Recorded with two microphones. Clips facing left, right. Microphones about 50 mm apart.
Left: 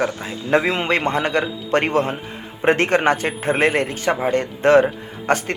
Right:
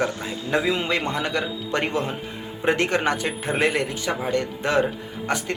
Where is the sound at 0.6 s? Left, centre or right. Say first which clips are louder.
Left 4 dB; left.